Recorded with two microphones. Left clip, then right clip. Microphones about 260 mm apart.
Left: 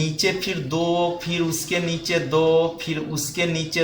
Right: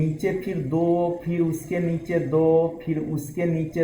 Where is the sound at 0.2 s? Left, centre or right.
Left.